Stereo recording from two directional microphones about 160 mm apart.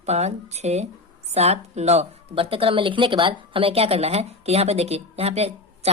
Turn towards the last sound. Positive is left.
turn(degrees=-40)  # may be behind; listen again after turning